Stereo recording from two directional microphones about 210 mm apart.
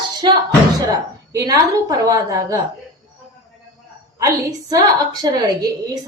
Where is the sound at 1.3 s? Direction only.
15° right (ahead or behind).